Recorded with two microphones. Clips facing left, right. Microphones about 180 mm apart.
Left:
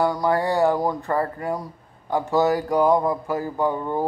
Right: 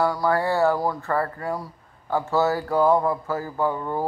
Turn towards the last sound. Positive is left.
turn(degrees=15)  # may be behind; listen again after turning